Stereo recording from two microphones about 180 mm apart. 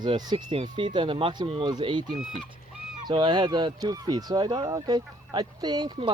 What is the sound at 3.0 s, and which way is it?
Speech, 25° right (ahead or behind).